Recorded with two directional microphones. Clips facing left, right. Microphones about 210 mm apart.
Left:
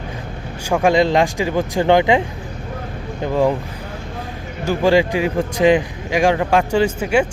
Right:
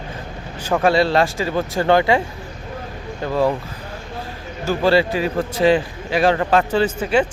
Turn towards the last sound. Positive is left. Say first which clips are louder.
# left 1 dB
turn(degrees=10)  # may be behind; listen again after turning